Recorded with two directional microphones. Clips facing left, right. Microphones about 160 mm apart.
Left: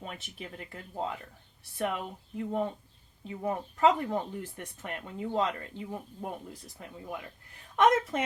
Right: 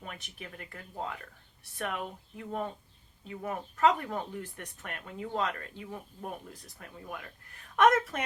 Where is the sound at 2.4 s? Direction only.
20° left (ahead or behind).